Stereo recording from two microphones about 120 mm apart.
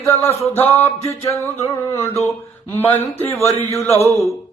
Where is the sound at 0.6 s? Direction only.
60° left (ahead or behind).